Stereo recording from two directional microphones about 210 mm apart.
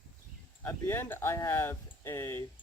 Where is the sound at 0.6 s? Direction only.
10° left (ahead or behind).